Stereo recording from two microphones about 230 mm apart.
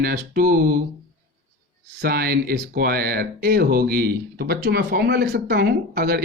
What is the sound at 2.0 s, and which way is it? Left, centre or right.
Speech, right.